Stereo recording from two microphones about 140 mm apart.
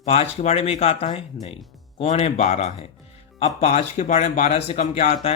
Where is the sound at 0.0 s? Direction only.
50° left (ahead or behind).